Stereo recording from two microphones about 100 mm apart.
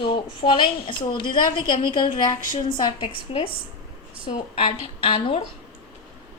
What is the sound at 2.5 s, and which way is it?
A woman's voice, 55° left (ahead or behind).